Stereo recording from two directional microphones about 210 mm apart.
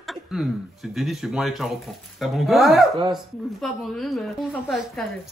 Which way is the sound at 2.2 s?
Centre (ahead or behind).